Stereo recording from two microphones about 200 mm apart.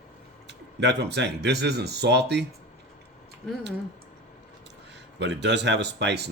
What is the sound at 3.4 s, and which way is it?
Speech, 5° left (ahead or behind).